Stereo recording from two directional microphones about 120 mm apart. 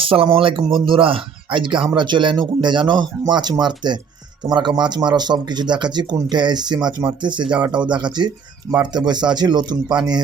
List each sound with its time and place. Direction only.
0.0 s speech: 50° right (ahead or behind)